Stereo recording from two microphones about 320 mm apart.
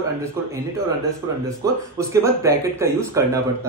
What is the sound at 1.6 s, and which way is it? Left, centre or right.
Speech, centre.